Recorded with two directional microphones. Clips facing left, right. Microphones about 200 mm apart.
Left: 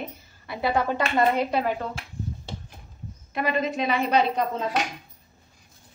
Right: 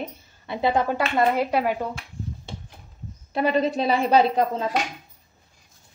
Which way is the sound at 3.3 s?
35° right (ahead or behind).